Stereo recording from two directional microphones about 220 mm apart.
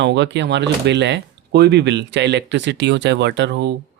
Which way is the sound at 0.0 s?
50° right (ahead or behind).